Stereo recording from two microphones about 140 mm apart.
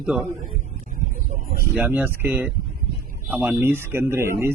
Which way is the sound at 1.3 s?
65° right (ahead or behind).